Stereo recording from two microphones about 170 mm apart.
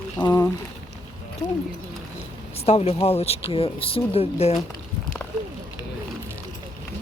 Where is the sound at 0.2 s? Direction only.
20° left (ahead or behind).